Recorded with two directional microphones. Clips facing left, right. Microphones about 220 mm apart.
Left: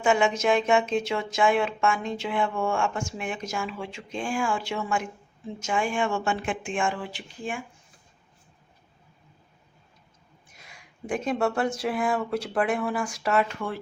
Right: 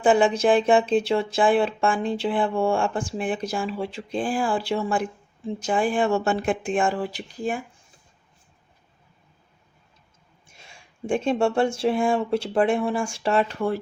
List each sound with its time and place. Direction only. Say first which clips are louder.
0.0 s speech: right 4 dB; 35° right (ahead or behind)
10.4 s speech: right 2 dB; 25° right (ahead or behind)